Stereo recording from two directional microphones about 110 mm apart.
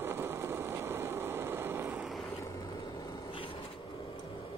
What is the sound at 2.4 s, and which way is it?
Vehicle, 35° left (ahead or behind).